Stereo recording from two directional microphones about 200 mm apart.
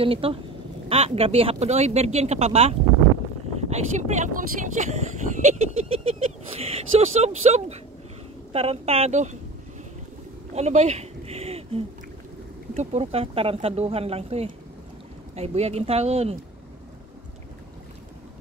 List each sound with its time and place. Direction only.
0.0 s speech: 30° right (ahead or behind)
10.5 s a sound: 35° right (ahead or behind)
12.7 s speech: 30° right (ahead or behind)